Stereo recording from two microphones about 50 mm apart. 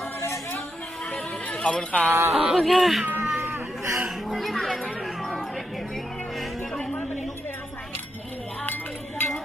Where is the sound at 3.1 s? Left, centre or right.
Right.